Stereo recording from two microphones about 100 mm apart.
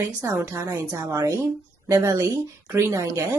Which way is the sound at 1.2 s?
35° right (ahead or behind).